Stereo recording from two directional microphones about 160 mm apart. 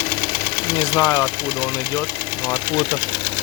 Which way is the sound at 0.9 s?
15° left (ahead or behind).